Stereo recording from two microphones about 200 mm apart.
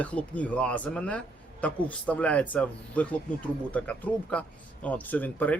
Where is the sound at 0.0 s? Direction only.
5° left (ahead or behind).